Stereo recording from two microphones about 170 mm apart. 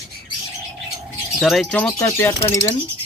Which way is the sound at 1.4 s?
Centre (ahead or behind).